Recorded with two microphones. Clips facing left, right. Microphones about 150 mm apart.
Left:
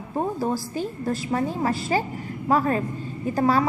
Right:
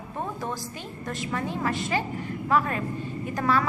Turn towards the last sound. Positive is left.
turn(degrees=30)  # may be behind; listen again after turning